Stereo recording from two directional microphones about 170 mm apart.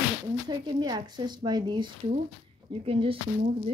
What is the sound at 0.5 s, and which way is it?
Speech, 25° right (ahead or behind).